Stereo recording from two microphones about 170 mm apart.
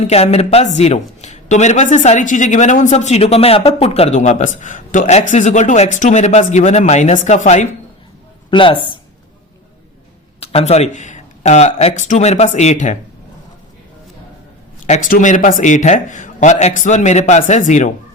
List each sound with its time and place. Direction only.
0.1 s a man's voice: 35° left (ahead or behind)
8.4 s speech: 30° left (ahead or behind)
10.4 s speech: 40° left (ahead or behind)
14.8 s a man's voice: 45° left (ahead or behind)